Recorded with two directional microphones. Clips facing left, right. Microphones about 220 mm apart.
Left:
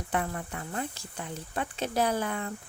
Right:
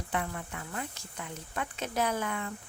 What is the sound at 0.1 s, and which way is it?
Speech, 45° left (ahead or behind).